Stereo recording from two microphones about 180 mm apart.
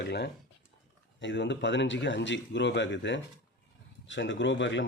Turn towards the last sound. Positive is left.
turn(degrees=90)